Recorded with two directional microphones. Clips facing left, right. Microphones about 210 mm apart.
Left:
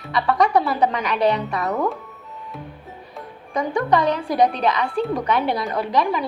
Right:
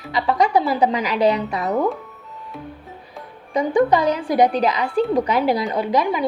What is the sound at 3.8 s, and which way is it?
Speech, centre (ahead or behind).